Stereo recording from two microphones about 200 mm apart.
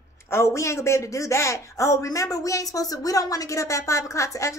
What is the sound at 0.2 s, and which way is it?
Speech, 10° left (ahead or behind).